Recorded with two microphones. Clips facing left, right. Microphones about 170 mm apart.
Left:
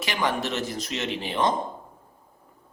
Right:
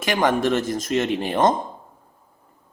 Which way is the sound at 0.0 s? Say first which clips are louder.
Right 7 dB; 50° right (ahead or behind).